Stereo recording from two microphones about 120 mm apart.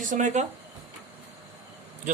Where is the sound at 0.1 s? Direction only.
90° right.